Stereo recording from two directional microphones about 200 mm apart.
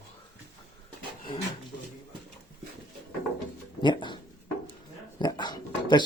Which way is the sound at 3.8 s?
20° left (ahead or behind).